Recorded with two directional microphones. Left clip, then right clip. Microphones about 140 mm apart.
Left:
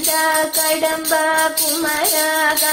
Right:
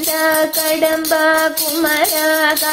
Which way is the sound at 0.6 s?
25° right (ahead or behind).